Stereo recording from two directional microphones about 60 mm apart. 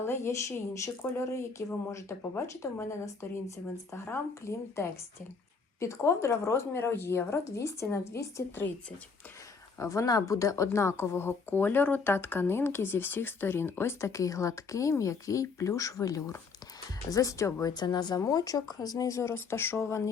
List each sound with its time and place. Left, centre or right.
0.0 s speech: left
7.6 s speech: left
8.1 s speech: left
9.7 s speech: left
14.1 s speech: left
18.3 s speech: left
19.3 s speech: left